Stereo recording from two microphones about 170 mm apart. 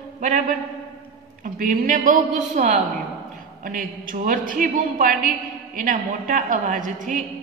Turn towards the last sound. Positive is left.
turn(degrees=-50)  # may be behind; listen again after turning